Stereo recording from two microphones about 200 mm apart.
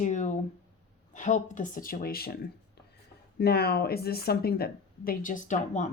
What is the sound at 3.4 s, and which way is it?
Speech, 50° left (ahead or behind).